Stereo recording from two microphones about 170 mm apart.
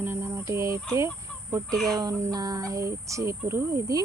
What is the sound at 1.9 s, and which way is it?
Speech, 20° right (ahead or behind).